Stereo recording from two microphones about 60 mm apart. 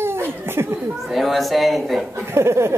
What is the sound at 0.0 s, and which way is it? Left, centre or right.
Laughter, right.